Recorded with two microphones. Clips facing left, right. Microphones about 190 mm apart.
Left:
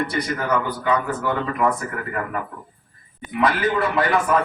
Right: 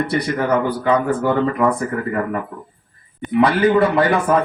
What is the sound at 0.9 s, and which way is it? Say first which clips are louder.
Speech: right 5 dB; 30° right (ahead or behind).